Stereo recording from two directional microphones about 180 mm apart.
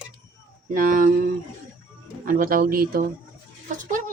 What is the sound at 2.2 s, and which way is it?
Speech, 50° right (ahead or behind).